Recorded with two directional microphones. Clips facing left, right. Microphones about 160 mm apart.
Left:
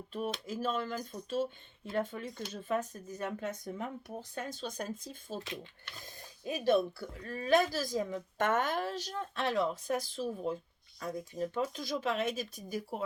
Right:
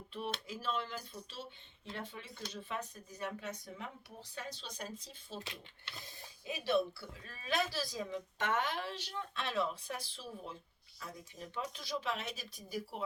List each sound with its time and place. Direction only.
0.1 s speech: 45° left (ahead or behind)
6.4 s speech: 45° left (ahead or behind)